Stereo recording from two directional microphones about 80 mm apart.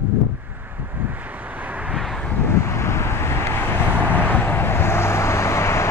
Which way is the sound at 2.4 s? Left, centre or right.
Left.